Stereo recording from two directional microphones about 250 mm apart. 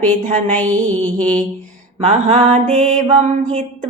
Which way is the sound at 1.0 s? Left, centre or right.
Centre.